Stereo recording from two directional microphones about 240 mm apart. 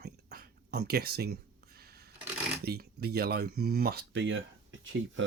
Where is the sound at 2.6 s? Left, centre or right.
Right.